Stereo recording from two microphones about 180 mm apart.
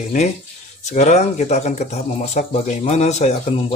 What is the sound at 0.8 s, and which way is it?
Speech, 40° left (ahead or behind).